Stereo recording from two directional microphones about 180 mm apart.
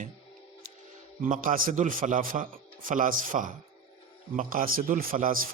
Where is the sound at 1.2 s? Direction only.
45° right (ahead or behind).